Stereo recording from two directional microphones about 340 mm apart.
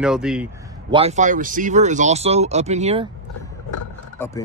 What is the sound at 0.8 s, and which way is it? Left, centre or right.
Speech, centre.